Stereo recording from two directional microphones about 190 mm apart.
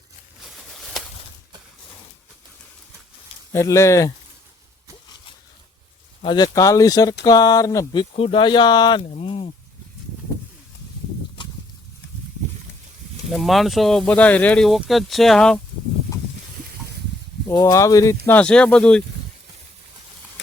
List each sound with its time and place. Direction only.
0.4 s a sound: centre (ahead or behind)
3.5 s speech: 15° left (ahead or behind)
6.2 s speech: 20° left (ahead or behind)
8.1 s speech: 30° left (ahead or behind)
13.3 s speech: centre (ahead or behind)
17.5 s speech: 15° left (ahead or behind)